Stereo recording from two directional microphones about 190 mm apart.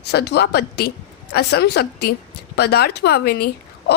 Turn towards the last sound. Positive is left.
turn(degrees=55)  # may be behind; listen again after turning